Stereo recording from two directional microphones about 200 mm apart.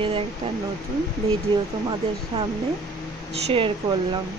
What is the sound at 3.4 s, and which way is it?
Speech, 25° right (ahead or behind).